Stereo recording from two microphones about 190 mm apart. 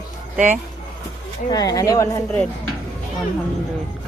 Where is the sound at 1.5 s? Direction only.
20° left (ahead or behind).